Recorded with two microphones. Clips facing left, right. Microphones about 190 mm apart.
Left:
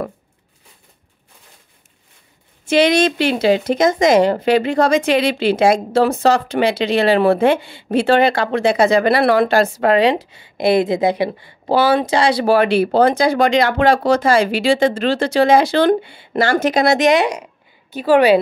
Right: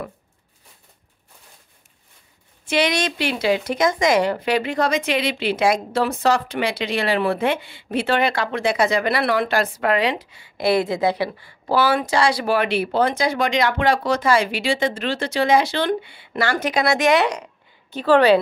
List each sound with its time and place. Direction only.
2.7 s speech: 25° left (ahead or behind); by 16.9 s 45° left (ahead or behind)
16.9 s speech: 20° left (ahead or behind)